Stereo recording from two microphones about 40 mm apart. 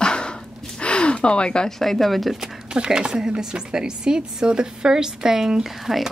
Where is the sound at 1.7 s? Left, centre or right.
Centre.